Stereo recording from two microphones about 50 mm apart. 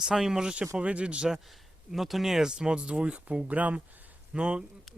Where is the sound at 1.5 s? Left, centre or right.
Centre.